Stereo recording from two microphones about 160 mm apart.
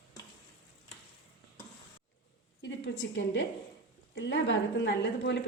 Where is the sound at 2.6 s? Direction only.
90° left.